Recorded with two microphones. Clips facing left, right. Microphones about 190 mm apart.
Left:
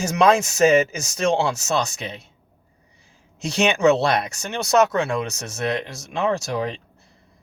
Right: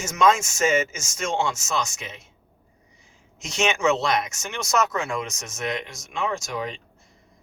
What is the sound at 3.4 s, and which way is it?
Speech, 35° left (ahead or behind).